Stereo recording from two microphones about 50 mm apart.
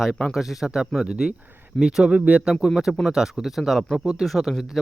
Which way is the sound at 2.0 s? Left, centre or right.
Right.